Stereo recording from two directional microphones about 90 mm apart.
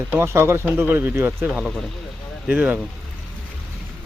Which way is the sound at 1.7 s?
Centre (ahead or behind).